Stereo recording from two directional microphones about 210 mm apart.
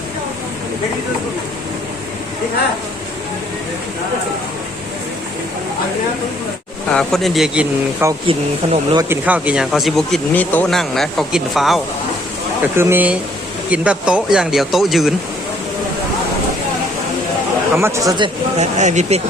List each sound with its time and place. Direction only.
6.9 s speech: centre (ahead or behind)
8.3 s speech: 25° right (ahead or behind)
9.0 s speech: 5° right (ahead or behind)
12.7 s speech: 10° right (ahead or behind)
17.7 s speech: 10° right (ahead or behind)
18.5 s speech: 35° right (ahead or behind)